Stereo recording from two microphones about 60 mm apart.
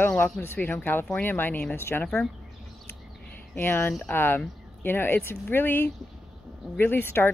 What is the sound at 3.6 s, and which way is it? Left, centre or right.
Speech, left.